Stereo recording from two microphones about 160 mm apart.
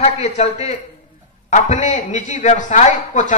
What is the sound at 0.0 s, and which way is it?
A man's voice, 40° left (ahead or behind).